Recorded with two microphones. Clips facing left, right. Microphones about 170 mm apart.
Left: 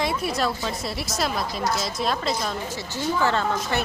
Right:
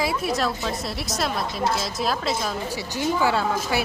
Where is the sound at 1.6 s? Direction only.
30° right (ahead or behind).